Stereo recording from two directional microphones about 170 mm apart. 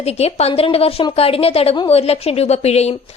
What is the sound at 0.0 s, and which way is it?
Speech, 40° left (ahead or behind).